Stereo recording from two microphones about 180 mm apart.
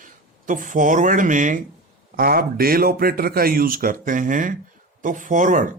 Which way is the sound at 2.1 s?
55° right (ahead or behind).